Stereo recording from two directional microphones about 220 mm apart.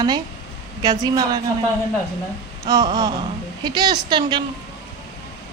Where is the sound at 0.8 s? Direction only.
15° right (ahead or behind).